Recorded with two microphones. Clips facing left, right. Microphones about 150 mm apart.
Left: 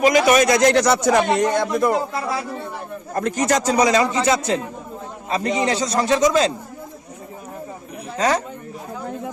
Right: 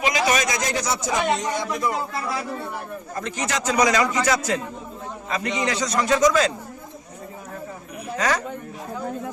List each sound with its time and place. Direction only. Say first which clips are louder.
0.0 s a man's voice: left 7 dB; 50° left (ahead or behind)
3.1 s a man's voice: left 9 dB; 50° left (ahead or behind); by 6.5 s 25° left (ahead or behind)